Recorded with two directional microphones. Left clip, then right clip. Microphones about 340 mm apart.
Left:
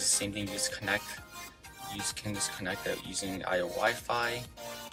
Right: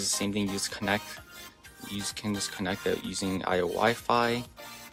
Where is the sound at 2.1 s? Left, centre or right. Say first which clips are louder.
Right 3 dB; centre.